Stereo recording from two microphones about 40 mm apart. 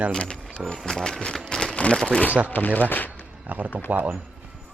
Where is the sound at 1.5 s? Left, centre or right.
Centre.